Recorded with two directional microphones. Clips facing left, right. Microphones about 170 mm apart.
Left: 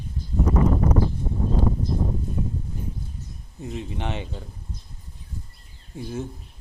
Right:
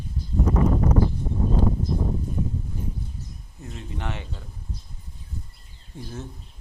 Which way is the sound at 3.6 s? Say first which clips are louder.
Left 4 dB; 15° left (ahead or behind).